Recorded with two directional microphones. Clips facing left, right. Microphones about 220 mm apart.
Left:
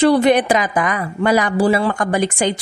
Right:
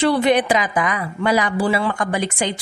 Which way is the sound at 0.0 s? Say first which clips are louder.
Left 4 dB; 45° left (ahead or behind).